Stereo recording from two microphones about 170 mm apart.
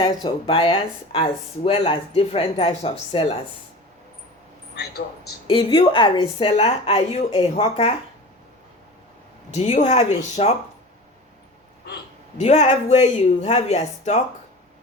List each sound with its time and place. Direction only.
0.0 s speech: 30° left (ahead or behind)
4.7 s speech: 70° left (ahead or behind)
5.5 s speech: 30° left (ahead or behind)
9.5 s speech: 40° left (ahead or behind)
12.4 s speech: 40° left (ahead or behind)